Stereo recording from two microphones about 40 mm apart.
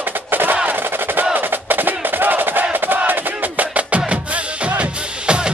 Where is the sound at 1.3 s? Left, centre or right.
Right.